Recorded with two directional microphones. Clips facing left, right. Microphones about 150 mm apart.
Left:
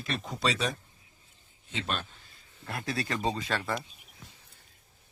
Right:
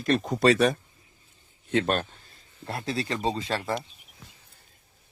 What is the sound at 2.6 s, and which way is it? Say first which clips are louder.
Speech: right 3 dB; 30° right (ahead or behind).